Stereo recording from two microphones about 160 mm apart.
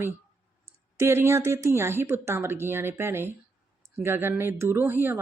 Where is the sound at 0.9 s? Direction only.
15° right (ahead or behind).